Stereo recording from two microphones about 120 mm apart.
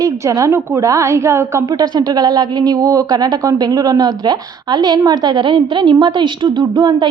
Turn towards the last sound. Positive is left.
turn(degrees=-35)  # may be behind; listen again after turning